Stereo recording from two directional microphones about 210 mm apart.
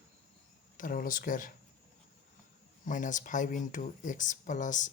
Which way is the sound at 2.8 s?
40° left (ahead or behind).